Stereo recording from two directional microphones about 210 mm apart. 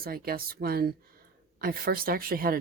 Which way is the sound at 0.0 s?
45° right (ahead or behind).